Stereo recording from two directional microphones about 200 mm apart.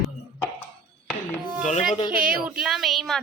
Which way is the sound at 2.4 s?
5° right (ahead or behind).